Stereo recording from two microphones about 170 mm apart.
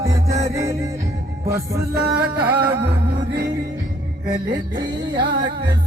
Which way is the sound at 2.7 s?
80° right.